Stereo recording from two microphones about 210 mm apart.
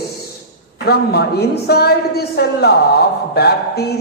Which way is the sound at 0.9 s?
50° left (ahead or behind).